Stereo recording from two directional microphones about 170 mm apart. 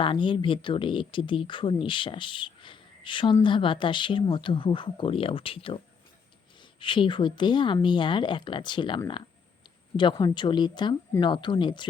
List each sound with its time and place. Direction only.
0.0 s speech: 30° left (ahead or behind)
10.0 s speech: 25° left (ahead or behind)